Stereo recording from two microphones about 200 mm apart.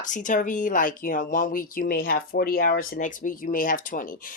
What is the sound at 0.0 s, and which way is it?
Speech, 40° left (ahead or behind).